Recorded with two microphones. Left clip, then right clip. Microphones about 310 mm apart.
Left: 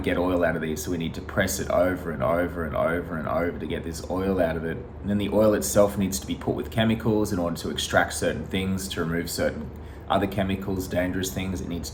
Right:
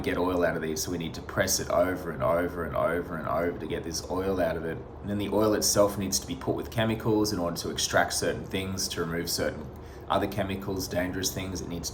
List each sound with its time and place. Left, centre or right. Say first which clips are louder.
0.0 s speech: left 3 dB; centre